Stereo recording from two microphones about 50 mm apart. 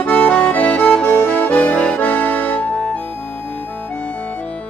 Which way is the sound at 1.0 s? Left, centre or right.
Left.